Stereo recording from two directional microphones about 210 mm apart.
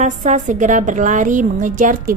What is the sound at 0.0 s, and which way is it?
A woman's voice, 35° right (ahead or behind).